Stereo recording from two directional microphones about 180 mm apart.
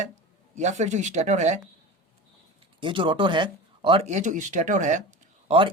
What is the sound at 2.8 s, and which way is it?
Speech, 30° right (ahead or behind).